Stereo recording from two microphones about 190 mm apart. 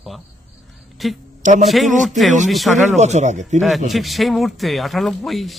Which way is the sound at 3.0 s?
35° right (ahead or behind).